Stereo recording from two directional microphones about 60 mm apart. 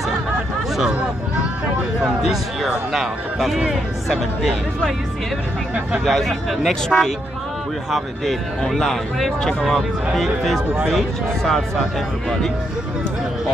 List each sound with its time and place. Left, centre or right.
0.7 s speech: centre
1.8 s a sound: centre
2.9 s speech: centre
6.0 s speech: centre